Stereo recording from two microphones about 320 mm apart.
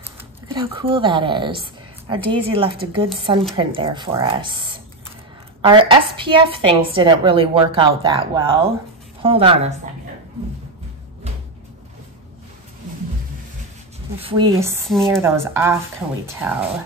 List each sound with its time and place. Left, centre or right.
0.5 s a woman's voice: centre
14.1 s a woman's voice: centre